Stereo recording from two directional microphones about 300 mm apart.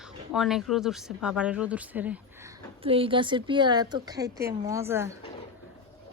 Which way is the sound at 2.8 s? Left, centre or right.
Centre.